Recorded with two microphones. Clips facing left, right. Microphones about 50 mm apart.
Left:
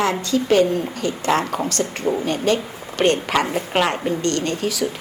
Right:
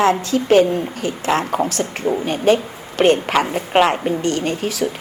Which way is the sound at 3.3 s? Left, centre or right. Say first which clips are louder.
Right 3 dB; right.